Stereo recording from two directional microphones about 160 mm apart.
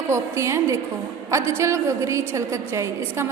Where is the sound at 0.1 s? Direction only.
15° right (ahead or behind).